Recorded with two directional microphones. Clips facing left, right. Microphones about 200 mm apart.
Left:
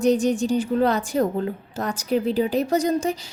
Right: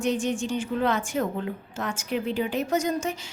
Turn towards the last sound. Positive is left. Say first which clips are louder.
# left 5 dB
turn(degrees=35)  # may be behind; listen again after turning